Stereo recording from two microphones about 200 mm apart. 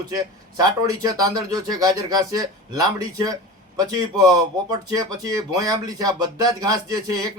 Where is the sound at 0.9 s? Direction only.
20° right (ahead or behind).